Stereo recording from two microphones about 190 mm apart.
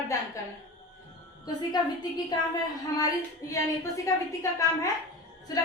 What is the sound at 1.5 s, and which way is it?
A woman's voice, 20° left (ahead or behind).